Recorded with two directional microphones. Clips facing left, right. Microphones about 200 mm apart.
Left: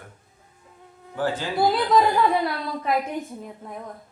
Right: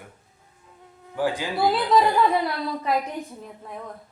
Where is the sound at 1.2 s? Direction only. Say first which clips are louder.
Right 1 dB; 15° right (ahead or behind).